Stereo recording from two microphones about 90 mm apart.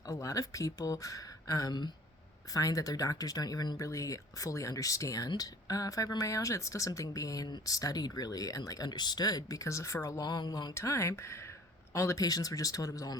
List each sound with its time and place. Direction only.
0.0 s speech: 35° left (ahead or behind)
10.2 s speech: 50° left (ahead or behind)
10.8 s speech: 30° left (ahead or behind)